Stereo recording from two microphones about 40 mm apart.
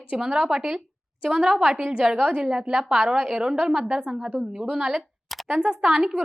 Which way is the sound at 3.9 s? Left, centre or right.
Right.